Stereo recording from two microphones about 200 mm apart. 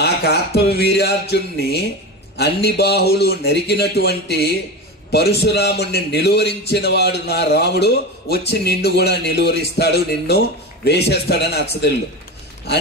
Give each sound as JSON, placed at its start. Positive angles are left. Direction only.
{"t": 0.0, "sound": "a man's voice", "side_deg": 55}